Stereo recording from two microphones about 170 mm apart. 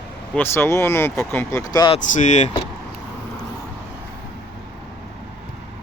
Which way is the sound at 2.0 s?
50° left (ahead or behind).